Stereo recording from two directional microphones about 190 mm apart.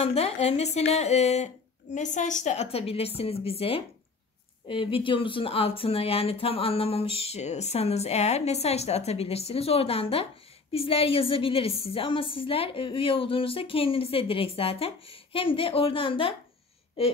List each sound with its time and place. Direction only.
0.0 s a woman's voice: 35° left (ahead or behind)